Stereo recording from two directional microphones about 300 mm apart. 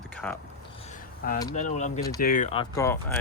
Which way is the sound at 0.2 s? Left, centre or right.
Centre.